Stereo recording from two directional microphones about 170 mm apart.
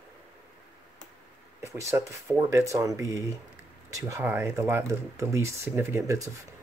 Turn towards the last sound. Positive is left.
turn(degrees=-20)  # may be behind; listen again after turning